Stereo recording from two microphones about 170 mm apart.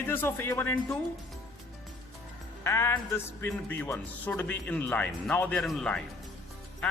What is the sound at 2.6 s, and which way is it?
A man's voice, 15° left (ahead or behind).